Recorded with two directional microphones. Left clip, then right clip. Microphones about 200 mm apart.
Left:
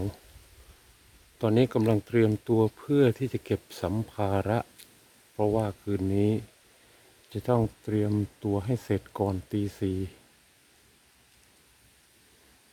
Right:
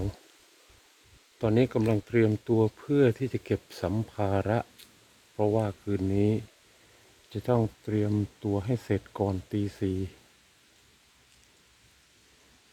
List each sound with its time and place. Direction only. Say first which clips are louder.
1.4 s speech: left 1 dB; 5° left (ahead or behind)